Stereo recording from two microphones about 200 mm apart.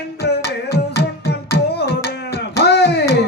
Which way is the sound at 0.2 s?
55° left (ahead or behind).